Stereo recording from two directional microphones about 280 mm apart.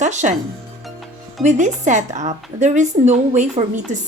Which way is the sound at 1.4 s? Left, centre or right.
Right.